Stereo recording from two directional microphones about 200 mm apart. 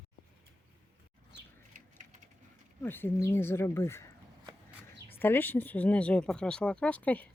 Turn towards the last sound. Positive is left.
turn(degrees=5)  # may be behind; listen again after turning